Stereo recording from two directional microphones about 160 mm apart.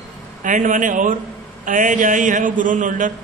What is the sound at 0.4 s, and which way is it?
A man's voice, 50° right (ahead or behind).